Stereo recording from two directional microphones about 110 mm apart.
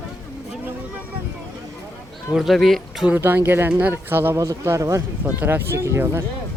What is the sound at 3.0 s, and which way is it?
Speech, 15° right (ahead or behind).